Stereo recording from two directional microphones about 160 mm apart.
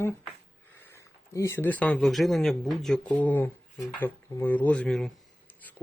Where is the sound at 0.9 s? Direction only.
15° left (ahead or behind).